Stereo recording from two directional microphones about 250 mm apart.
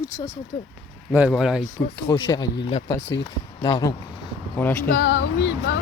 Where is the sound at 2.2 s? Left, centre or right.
Centre.